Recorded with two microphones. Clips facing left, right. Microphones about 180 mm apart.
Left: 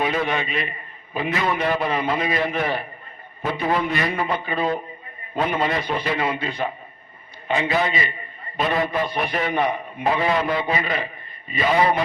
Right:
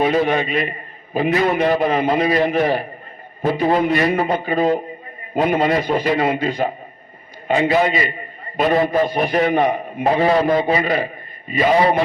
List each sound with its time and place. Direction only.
0.0 s a man's voice: 40° right (ahead or behind)